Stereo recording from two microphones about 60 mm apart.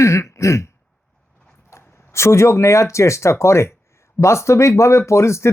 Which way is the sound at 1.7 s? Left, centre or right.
Left.